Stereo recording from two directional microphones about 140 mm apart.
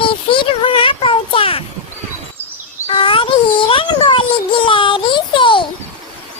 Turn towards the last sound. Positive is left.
turn(degrees=35)  # may be behind; listen again after turning